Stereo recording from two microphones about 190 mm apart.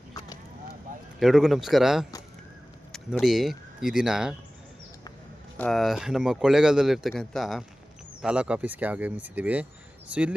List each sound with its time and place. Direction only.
0.1 s a sound: 20° left (ahead or behind)
1.2 s speech: centre (ahead or behind)
5.5 s speech: 5° left (ahead or behind)